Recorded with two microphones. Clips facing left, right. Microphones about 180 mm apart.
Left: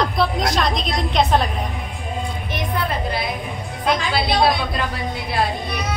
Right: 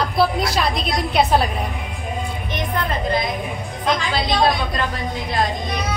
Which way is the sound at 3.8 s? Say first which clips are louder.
Left 1 dB; 10° left (ahead or behind).